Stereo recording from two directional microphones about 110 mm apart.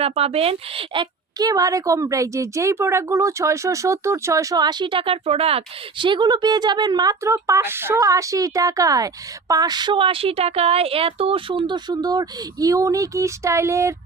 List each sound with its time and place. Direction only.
0.0 s speech: 70° right (ahead or behind)
1.4 s a woman's voice: 35° right (ahead or behind)